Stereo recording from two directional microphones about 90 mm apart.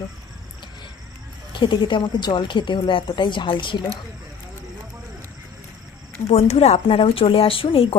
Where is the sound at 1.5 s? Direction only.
60° left (ahead or behind).